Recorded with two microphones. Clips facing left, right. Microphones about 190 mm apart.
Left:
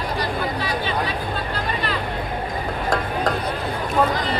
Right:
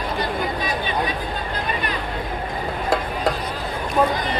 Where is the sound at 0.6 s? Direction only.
15° right (ahead or behind).